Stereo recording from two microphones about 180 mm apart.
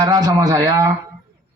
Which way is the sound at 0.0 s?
20° right (ahead or behind).